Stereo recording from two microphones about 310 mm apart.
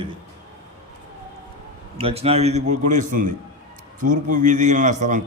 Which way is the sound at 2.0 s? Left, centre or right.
Centre.